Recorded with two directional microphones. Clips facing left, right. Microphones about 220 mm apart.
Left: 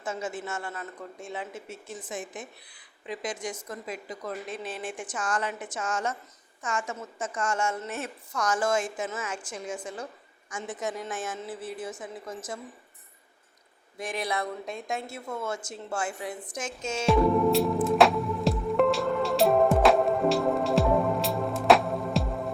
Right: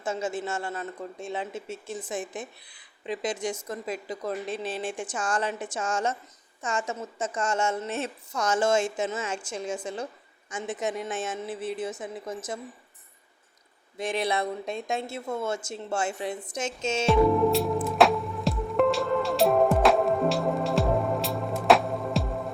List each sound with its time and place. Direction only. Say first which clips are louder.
0.0 s a woman's voice: right 4 dB; 30° right (ahead or behind)
14.0 s a woman's voice: right 4 dB; 25° right (ahead or behind)
17.1 s music: right 1 dB; centre (ahead or behind)